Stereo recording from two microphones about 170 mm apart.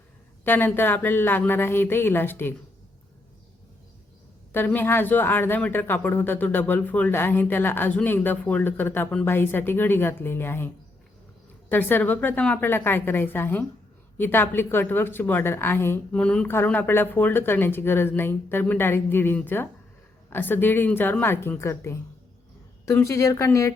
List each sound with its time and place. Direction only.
0.4 s speech: 10° left (ahead or behind)
4.5 s speech: 10° left (ahead or behind)
11.7 s speech: 10° left (ahead or behind)